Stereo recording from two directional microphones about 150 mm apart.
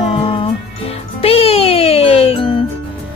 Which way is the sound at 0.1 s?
35° left (ahead or behind).